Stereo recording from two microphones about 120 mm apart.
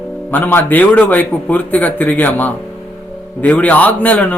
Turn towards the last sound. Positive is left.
turn(degrees=10)  # may be behind; listen again after turning